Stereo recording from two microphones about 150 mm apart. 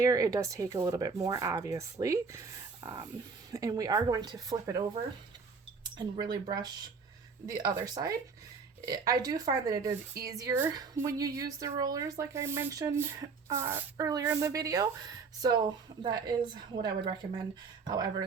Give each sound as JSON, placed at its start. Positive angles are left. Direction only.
{"t": 0.0, "sound": "speech", "side_deg": -20}
{"t": 6.0, "sound": "speech", "side_deg": -30}
{"t": 7.8, "sound": "speech", "side_deg": -25}